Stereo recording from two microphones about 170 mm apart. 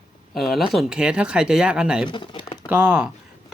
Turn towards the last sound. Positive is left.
turn(degrees=-10)  # may be behind; listen again after turning